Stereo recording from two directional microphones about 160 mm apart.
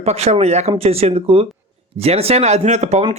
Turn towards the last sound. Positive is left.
turn(degrees=-45)  # may be behind; listen again after turning